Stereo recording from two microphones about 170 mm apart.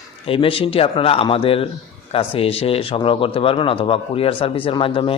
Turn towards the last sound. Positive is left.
turn(degrees=30)  # may be behind; listen again after turning